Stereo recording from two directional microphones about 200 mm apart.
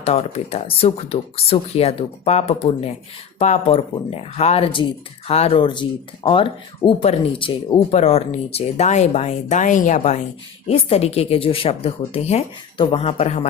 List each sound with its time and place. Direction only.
0.0 s speech: 30° left (ahead or behind)